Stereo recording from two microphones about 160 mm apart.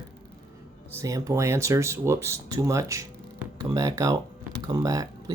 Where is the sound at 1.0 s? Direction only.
20° right (ahead or behind).